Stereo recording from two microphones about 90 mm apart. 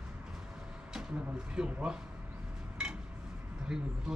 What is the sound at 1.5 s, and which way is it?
Speech, 10° right (ahead or behind).